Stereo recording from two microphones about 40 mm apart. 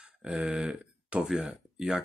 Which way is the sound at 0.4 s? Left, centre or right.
Right.